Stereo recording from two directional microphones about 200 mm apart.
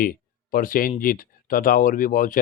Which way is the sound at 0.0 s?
45° left (ahead or behind).